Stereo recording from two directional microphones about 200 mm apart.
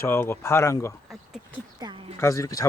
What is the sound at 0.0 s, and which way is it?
Speech, 10° left (ahead or behind).